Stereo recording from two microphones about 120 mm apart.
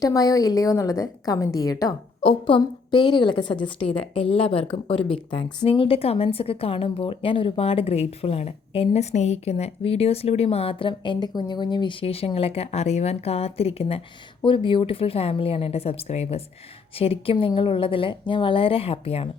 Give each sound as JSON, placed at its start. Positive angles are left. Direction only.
{"t": 0.0, "sound": "a woman's voice", "side_deg": 30}
{"t": 2.2, "sound": "a woman's voice", "side_deg": 45}
{"t": 14.4, "sound": "a woman's voice", "side_deg": 45}
{"t": 17.0, "sound": "a woman's voice", "side_deg": 50}